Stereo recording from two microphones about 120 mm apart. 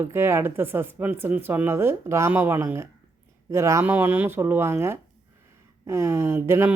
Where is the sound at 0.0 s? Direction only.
20° right (ahead or behind).